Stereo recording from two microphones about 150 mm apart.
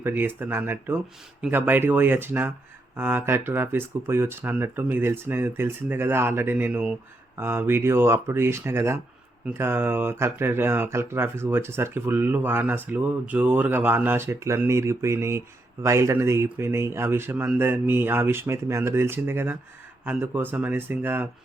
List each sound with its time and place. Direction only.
0.0 s speech: 15° right (ahead or behind)